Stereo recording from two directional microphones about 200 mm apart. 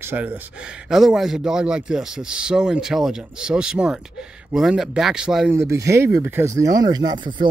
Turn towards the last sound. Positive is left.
turn(degrees=-20)  # may be behind; listen again after turning